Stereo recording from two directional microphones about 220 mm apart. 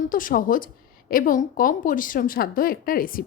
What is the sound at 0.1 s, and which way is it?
Speech, 40° left (ahead or behind).